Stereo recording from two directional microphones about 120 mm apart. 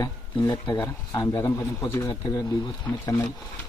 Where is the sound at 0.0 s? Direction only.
35° left (ahead or behind).